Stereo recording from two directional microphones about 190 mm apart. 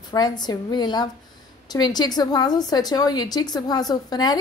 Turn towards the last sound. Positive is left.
turn(degrees=20)  # may be behind; listen again after turning